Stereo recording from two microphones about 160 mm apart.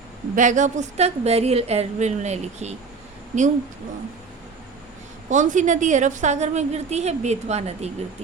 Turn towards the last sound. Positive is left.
turn(degrees=-40)  # may be behind; listen again after turning